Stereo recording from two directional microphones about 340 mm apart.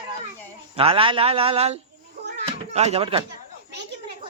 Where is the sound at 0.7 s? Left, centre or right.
Centre.